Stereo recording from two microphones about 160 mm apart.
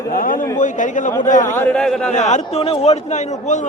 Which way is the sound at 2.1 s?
45° left (ahead or behind).